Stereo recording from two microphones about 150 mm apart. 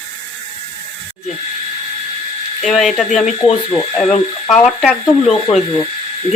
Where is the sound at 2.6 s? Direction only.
Centre (ahead or behind).